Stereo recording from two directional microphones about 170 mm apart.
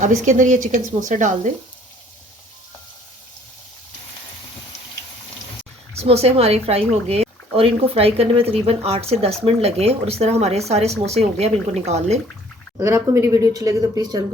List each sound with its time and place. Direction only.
0.0 s a woman's voice: 45° right (ahead or behind)
6.0 s speech: 40° right (ahead or behind)
12.7 s speech: 20° right (ahead or behind)